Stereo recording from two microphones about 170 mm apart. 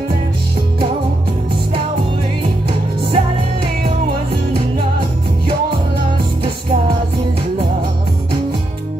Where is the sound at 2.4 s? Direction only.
30° right (ahead or behind).